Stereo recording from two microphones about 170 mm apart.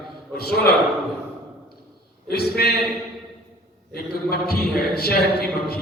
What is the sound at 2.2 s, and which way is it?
Speech, 70° left (ahead or behind).